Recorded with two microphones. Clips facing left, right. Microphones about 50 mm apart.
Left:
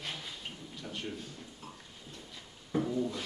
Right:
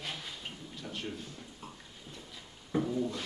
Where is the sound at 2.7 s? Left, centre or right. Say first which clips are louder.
Even; centre.